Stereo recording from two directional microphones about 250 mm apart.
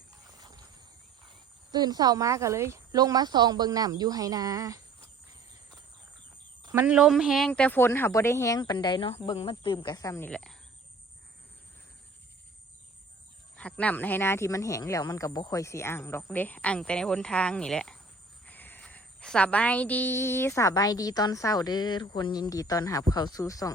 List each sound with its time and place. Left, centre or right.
0.3 s horse: centre
1.7 s speech: centre
6.6 s cricket: centre
6.8 s a woman's voice: centre
13.6 s a woman's voice: centre